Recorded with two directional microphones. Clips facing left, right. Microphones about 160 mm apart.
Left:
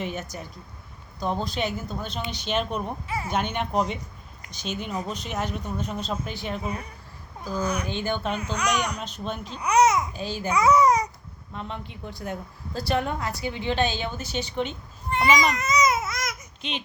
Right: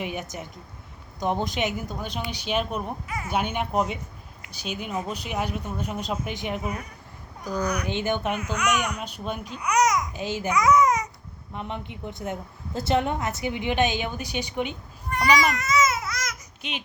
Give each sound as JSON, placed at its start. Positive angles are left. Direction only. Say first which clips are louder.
{"t": 0.0, "sound": "a woman's voice", "louder": "even", "side_deg": -15}
{"t": 3.1, "sound": "speech", "louder": "left 2 dB", "side_deg": 30}
{"t": 3.3, "sound": "a woman's voice", "louder": "right 1 dB", "side_deg": -10}
{"t": 7.5, "sound": "speech", "louder": "even", "side_deg": 25}
{"t": 7.9, "sound": "a woman's voice", "louder": "right 2 dB", "side_deg": -20}
{"t": 8.4, "sound": "a child's voice", "louder": "even", "side_deg": 35}
{"t": 9.0, "sound": "a woman's voice", "louder": "even", "side_deg": -10}
{"t": 9.6, "sound": "babbling", "louder": "left 3 dB", "side_deg": 30}
{"t": 10.1, "sound": "a child's voice", "louder": "right 1 dB", "side_deg": -20}
{"t": 10.5, "sound": "babbling", "louder": "left 1 dB", "side_deg": 30}
{"t": 11.5, "sound": "a woman's voice", "louder": "right 2 dB", "side_deg": -20}
{"t": 15.1, "sound": "babbling", "louder": "even", "side_deg": 20}
{"t": 16.6, "sound": "speech", "louder": "left 2 dB", "side_deg": -10}